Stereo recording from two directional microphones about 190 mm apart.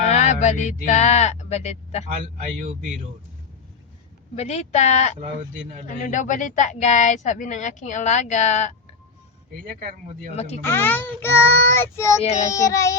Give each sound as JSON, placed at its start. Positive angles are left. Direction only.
{"t": 0.0, "sound": "speech", "side_deg": 35}
{"t": 2.1, "sound": "a man's voice", "side_deg": -40}
{"t": 4.4, "sound": "speech", "side_deg": 35}
{"t": 10.6, "sound": "speech", "side_deg": 10}